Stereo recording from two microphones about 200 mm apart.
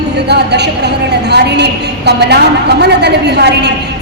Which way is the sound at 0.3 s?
55° right (ahead or behind).